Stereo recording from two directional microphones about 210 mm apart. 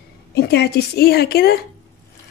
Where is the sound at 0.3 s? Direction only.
50° left (ahead or behind).